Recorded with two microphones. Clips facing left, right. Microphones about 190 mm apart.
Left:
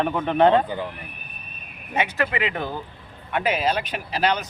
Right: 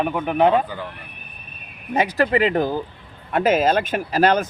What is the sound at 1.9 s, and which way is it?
Speech, 35° right (ahead or behind).